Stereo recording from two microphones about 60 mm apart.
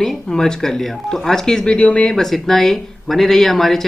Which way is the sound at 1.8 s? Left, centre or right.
Left.